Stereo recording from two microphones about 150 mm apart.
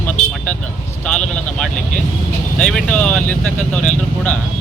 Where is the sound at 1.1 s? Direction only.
5° left (ahead or behind).